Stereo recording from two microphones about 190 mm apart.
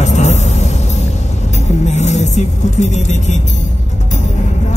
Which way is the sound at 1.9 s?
35° left (ahead or behind).